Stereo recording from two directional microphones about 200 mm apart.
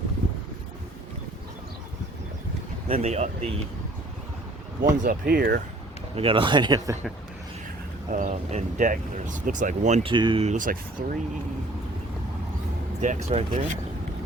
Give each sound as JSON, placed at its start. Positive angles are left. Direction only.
{"t": 2.8, "sound": "speech", "side_deg": -30}
{"t": 4.8, "sound": "speech", "side_deg": -45}
{"t": 6.1, "sound": "speech", "side_deg": -25}
{"t": 8.1, "sound": "speech", "side_deg": -40}
{"t": 13.0, "sound": "speech", "side_deg": -40}